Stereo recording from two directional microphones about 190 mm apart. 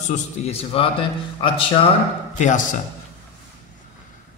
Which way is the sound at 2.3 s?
40° left (ahead or behind).